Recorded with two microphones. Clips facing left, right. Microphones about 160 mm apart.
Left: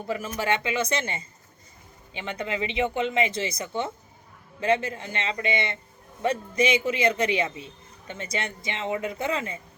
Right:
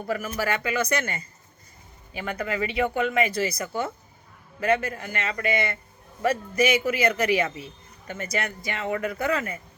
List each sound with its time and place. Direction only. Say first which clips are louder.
0.3 s a man's voice: left 1 dB; 25° left (ahead or behind)
2.1 s a man's voice: right 2 dB; 25° left (ahead or behind)